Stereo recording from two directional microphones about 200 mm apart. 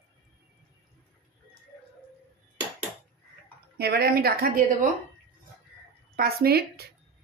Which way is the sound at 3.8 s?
50° right (ahead or behind).